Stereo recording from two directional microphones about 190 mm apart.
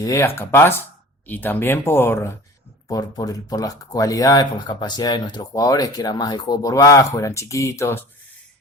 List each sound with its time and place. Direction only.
0.0 s speech: 15° left (ahead or behind)